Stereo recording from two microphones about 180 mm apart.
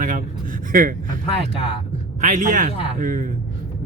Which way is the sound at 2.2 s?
45° right (ahead or behind).